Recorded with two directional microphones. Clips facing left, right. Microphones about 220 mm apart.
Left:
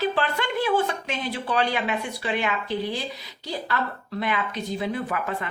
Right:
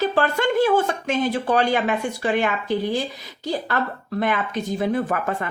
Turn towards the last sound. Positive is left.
turn(degrees=-45)  # may be behind; listen again after turning